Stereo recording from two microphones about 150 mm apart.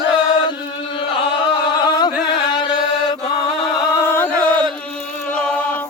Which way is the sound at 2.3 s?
30° left (ahead or behind).